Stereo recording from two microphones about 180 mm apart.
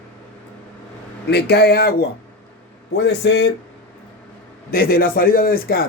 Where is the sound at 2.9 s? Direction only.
75° left (ahead or behind).